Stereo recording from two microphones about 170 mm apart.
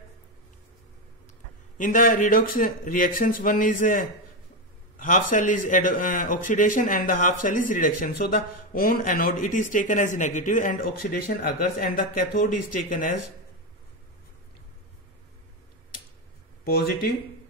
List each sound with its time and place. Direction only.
1.8 s speech: 50° left (ahead or behind)
16.6 s speech: 65° left (ahead or behind)